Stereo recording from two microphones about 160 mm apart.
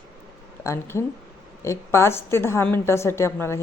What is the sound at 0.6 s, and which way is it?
A woman's voice, 15° left (ahead or behind).